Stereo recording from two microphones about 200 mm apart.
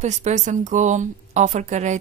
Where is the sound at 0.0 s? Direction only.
35° right (ahead or behind).